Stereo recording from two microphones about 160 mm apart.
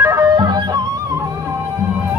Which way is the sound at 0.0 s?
15° right (ahead or behind).